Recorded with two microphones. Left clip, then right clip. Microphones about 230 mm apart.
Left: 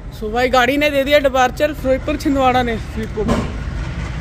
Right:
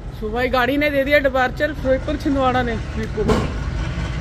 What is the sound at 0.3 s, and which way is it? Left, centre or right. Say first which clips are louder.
Speech: left 4 dB; left.